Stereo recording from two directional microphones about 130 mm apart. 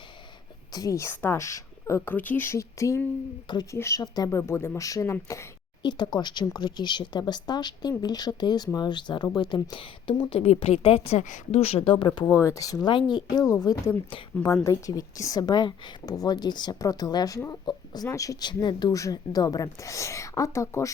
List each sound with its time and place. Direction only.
0.7 s a woman's voice: 25° left (ahead or behind)
5.8 s speech: 35° left (ahead or behind)
12.2 s a woman's voice: 20° left (ahead or behind)